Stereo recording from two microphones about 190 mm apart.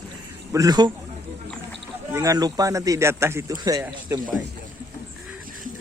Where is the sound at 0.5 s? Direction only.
20° right (ahead or behind).